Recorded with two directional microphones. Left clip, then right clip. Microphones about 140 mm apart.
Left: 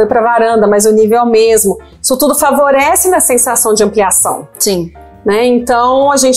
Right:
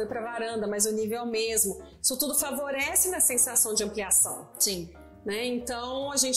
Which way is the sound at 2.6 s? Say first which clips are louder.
Left 19 dB; 35° left (ahead or behind).